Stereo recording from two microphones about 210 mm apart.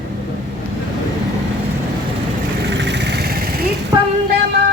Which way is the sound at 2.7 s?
55° right (ahead or behind).